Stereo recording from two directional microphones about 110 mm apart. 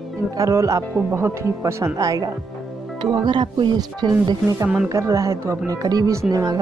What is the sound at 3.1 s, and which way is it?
Music, 45° right (ahead or behind).